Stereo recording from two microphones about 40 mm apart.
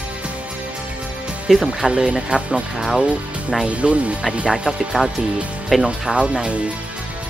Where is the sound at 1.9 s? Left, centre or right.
Right.